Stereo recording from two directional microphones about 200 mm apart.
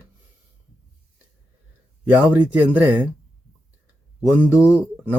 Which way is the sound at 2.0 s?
10° right (ahead or behind).